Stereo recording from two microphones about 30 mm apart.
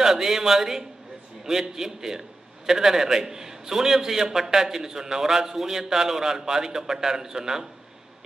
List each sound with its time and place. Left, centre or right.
0.0 s a man's voice: centre